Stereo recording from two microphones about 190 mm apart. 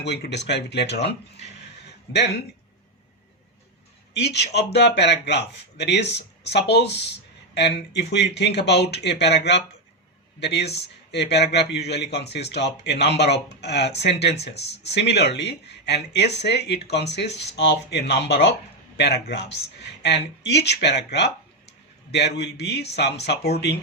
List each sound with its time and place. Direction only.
0.0 s speech: 60° left (ahead or behind)
2.1 s speech: 60° left (ahead or behind)
4.1 s speech: 60° left (ahead or behind)
22.4 s speech: 60° left (ahead or behind)